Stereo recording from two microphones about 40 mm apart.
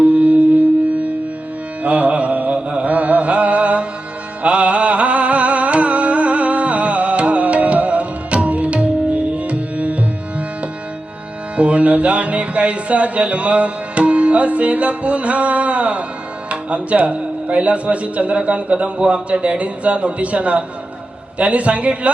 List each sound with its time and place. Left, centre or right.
0.1 s music: right
1.8 s carnatic music: right
4.4 s music: right
11.5 s music: right
16.5 s speech: right